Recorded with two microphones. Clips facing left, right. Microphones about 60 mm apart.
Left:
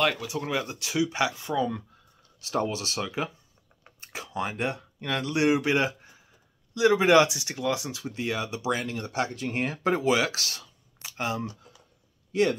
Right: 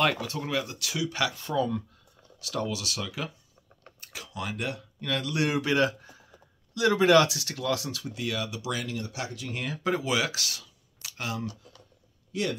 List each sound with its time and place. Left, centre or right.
0.0 s speech: centre
0.3 s speech: centre
2.4 s speech: left
12.3 s speech: left